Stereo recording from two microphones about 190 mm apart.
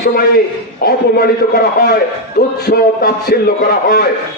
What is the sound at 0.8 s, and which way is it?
A man's voice, 55° left (ahead or behind).